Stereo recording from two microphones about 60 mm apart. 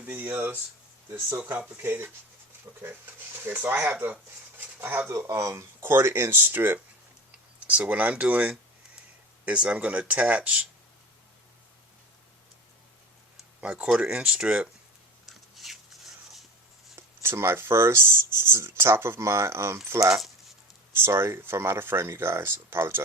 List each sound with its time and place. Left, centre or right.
0.0 s speech: right
1.7 s speech: right
3.4 s speech: right
4.8 s speech: right
5.1 s speech: right
7.7 s speech: right
13.6 s speech: right
15.3 s a sound: centre
16.9 s speech: right
20.1 s speech: centre
20.9 s speech: right